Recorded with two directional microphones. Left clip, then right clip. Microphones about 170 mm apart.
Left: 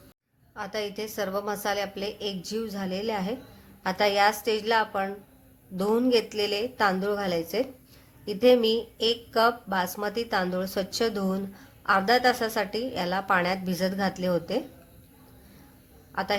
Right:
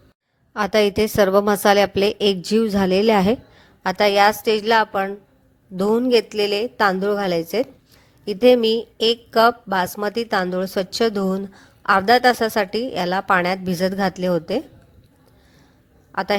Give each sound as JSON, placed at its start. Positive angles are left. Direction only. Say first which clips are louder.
{"t": 0.5, "sound": "a woman's voice", "louder": "right 15 dB", "side_deg": -50}
{"t": 16.1, "sound": "a woman's voice", "louder": "right 7 dB", "side_deg": -45}